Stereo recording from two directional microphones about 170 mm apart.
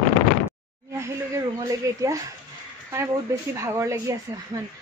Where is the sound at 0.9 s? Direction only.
15° right (ahead or behind).